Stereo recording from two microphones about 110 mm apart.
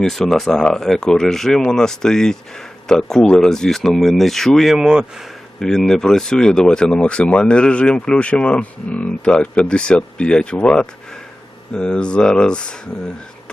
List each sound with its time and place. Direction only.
0.0 s speech: centre (ahead or behind)
5.5 s speech: 5° left (ahead or behind)